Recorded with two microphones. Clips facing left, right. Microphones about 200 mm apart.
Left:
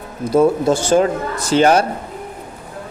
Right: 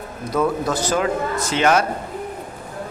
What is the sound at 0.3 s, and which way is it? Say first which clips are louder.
Speech: left 7 dB; 25° left (ahead or behind).